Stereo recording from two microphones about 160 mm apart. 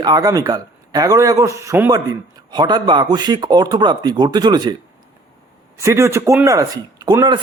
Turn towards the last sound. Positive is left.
turn(degrees=-25)  # may be behind; listen again after turning